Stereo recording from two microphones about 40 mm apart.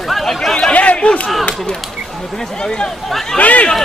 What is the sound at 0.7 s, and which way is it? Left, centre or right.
Speech, left.